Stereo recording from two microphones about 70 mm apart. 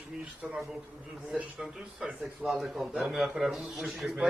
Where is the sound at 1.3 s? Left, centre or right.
Centre.